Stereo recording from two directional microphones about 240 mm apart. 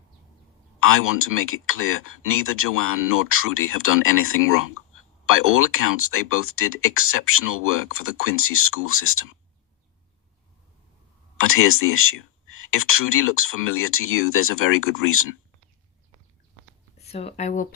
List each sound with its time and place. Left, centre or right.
0.8 s speech: left
11.3 s speech: left
17.1 s speech: left